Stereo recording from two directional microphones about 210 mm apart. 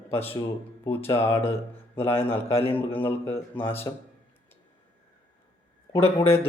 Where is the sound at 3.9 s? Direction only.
20° left (ahead or behind).